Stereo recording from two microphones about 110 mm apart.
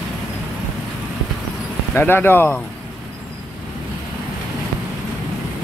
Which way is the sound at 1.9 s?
20° left (ahead or behind).